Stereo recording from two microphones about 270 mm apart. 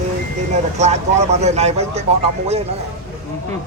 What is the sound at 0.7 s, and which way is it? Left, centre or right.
Speech, right.